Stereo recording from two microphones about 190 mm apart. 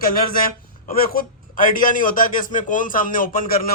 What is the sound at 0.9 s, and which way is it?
A man's voice, 50° left (ahead or behind).